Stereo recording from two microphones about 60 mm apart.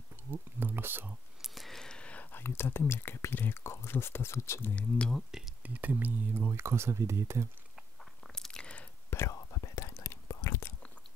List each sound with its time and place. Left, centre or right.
0.1 s a sound: right
1.4 s a sound: centre
2.3 s speech: left
4.7 s speech: left
5.6 s speech: right
8.0 s crunch: centre
9.3 s whispering: left